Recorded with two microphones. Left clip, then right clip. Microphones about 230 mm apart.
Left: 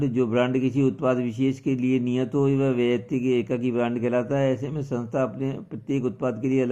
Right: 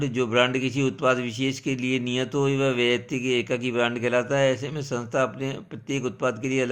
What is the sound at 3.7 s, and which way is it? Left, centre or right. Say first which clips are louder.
Speech: right 2 dB; right.